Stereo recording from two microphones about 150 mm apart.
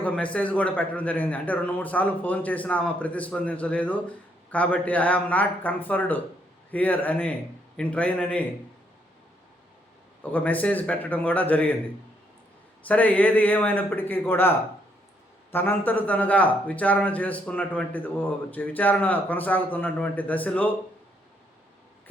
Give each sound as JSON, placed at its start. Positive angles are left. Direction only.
{"t": 0.0, "sound": "speech", "side_deg": 10}
{"t": 10.3, "sound": "speech", "side_deg": 10}
{"t": 12.9, "sound": "speech", "side_deg": 10}
{"t": 15.5, "sound": "speech", "side_deg": 15}